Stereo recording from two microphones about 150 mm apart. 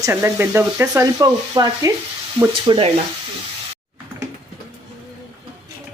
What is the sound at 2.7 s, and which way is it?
Frying, 30° right (ahead or behind).